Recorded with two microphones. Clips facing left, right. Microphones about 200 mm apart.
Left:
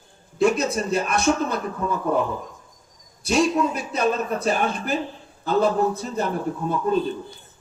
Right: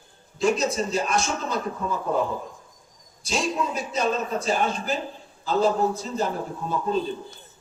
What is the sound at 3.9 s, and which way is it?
A man's voice, 60° left (ahead or behind).